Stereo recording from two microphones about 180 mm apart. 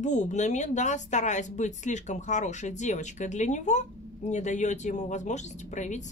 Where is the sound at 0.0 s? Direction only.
40° left (ahead or behind).